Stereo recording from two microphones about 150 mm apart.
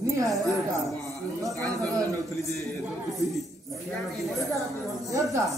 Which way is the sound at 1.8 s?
20° right (ahead or behind).